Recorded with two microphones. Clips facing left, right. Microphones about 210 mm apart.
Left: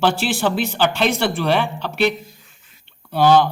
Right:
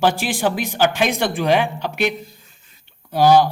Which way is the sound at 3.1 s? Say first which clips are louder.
Right 1 dB; 10° right (ahead or behind).